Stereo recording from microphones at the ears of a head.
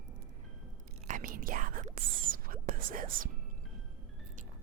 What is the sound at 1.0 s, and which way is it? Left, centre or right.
Whispering, right.